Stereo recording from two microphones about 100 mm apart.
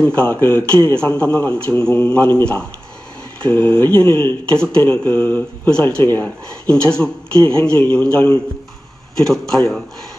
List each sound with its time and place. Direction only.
0.0 s a man's voice: 15° left (ahead or behind)
3.4 s a man's voice: 15° left (ahead or behind)